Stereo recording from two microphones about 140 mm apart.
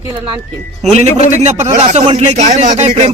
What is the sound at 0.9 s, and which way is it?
A man's voice, 50° right (ahead or behind).